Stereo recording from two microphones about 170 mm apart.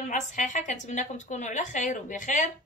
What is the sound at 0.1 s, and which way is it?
A woman's voice, 50° left (ahead or behind).